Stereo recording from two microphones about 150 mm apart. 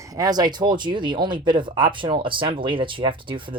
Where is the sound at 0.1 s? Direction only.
25° right (ahead or behind).